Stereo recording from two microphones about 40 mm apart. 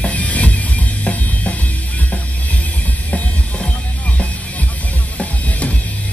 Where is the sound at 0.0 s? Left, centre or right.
Left.